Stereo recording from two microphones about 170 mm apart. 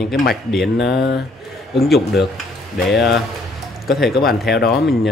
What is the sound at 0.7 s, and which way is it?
Speech, 75° left (ahead or behind).